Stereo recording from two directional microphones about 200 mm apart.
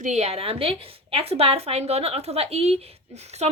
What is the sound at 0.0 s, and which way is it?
A woman's voice, 35° right (ahead or behind).